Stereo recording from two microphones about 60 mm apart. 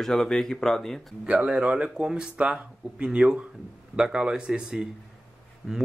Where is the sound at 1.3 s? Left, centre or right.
Centre.